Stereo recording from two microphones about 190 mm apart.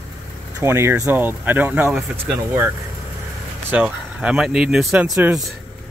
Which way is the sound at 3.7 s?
5° right (ahead or behind).